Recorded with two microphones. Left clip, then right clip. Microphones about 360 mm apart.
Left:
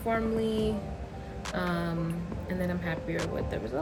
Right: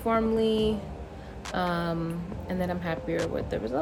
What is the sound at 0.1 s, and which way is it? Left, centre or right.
Speech, centre.